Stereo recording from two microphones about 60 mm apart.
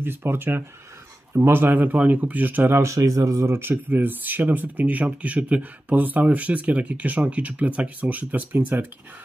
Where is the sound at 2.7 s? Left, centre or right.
Right.